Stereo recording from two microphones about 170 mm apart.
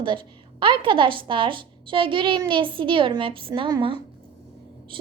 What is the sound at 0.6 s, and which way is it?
A child's voice, 30° right (ahead or behind).